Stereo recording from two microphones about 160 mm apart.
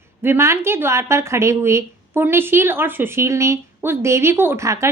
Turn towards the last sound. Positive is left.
turn(degrees=-20)  # may be behind; listen again after turning